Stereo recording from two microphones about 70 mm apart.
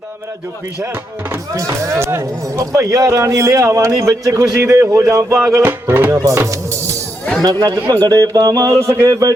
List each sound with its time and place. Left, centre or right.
1.5 s speech: right
2.6 s speech: right
4.0 s speech: right
5.8 s music: right
7.4 s speech: right
8.0 s speech: right